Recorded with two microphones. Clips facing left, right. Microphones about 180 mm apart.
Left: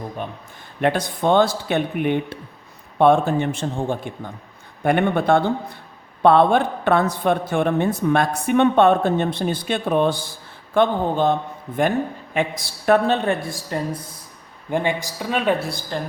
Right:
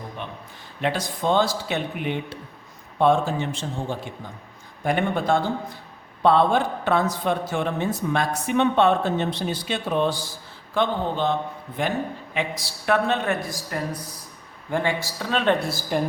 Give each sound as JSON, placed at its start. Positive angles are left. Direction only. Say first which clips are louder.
{"t": 0.8, "sound": "a woman's voice", "louder": "left 5 dB", "side_deg": 55}
{"t": 15.5, "sound": "a woman's voice", "louder": "even", "side_deg": 0}